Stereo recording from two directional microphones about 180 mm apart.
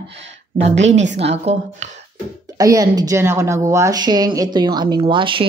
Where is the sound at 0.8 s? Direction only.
85° right.